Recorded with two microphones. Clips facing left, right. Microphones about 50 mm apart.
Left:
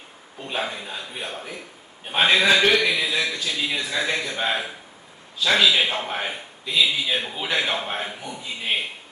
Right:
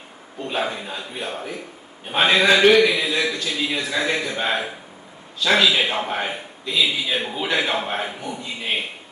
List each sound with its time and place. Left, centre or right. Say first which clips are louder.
0.4 s a man's voice: right 3 dB; centre